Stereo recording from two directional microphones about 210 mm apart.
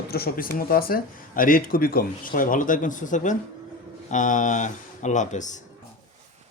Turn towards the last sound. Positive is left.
turn(degrees=35)  # may be behind; listen again after turning